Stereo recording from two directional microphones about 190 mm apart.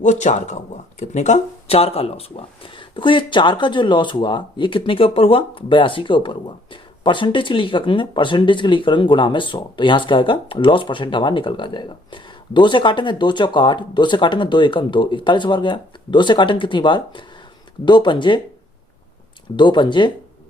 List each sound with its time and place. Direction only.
0.0 s speech: 40° left (ahead or behind)
19.5 s speech: 25° left (ahead or behind)